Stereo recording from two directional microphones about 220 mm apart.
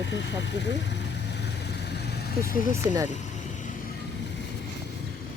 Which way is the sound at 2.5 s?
40° left (ahead or behind).